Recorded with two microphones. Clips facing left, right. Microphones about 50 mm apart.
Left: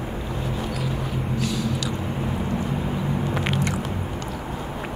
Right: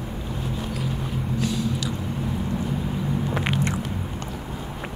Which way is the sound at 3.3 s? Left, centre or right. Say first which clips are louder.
Even; centre.